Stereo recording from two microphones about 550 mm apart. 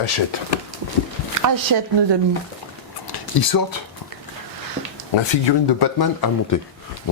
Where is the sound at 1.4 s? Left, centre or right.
Right.